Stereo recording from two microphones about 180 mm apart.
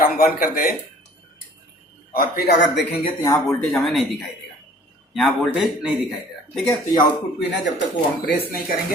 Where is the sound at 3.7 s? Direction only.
Centre (ahead or behind).